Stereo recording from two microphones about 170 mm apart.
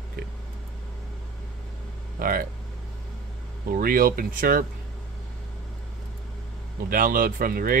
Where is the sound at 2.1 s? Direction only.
55° right (ahead or behind).